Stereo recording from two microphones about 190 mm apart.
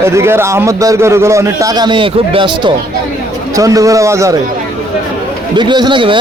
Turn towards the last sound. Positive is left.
turn(degrees=-25)  # may be behind; listen again after turning